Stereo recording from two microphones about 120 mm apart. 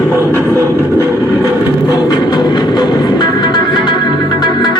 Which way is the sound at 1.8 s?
35° left (ahead or behind).